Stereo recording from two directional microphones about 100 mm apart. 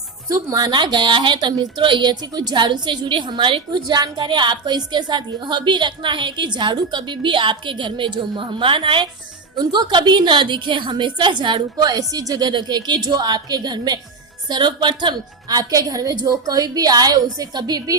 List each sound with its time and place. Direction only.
0.3 s a woman's voice: 35° right (ahead or behind)
0.7 s speech: 50° right (ahead or behind)
9.6 s a woman's voice: 45° right (ahead or behind)